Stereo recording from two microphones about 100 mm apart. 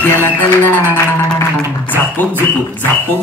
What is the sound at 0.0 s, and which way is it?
Music, 15° left (ahead or behind).